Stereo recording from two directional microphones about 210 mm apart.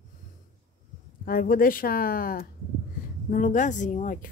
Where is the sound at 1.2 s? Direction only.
40° left (ahead or behind).